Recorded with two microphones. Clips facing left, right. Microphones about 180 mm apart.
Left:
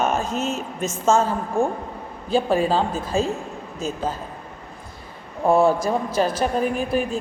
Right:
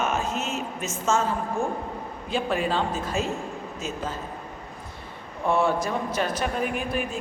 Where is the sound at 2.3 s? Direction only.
35° left (ahead or behind).